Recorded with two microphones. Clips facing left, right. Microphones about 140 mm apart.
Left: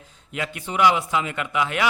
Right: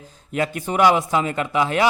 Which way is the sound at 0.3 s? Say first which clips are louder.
Right 5 dB; 45° right (ahead or behind).